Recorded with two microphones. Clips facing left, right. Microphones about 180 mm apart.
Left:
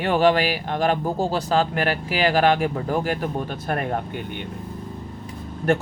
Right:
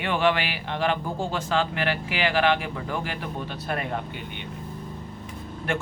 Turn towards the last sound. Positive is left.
turn(degrees=40)  # may be behind; listen again after turning